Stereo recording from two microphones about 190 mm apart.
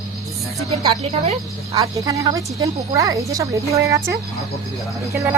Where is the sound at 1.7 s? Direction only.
20° right (ahead or behind).